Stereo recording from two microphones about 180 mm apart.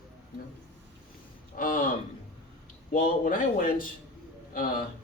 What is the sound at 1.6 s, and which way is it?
Speech, 50° left (ahead or behind).